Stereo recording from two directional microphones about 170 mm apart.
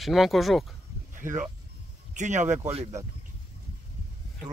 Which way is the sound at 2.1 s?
45° right (ahead or behind).